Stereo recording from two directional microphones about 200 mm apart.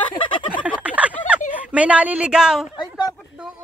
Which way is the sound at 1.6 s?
5° right (ahead or behind).